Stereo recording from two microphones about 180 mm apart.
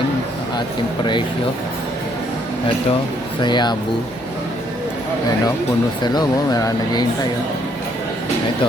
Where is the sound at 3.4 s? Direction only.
25° left (ahead or behind).